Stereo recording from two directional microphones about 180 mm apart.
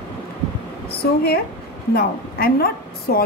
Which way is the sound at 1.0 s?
60° left (ahead or behind).